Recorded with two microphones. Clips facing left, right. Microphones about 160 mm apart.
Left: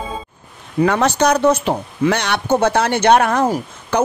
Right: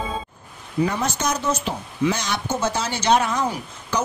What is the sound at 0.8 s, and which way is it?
Speech, 75° left (ahead or behind).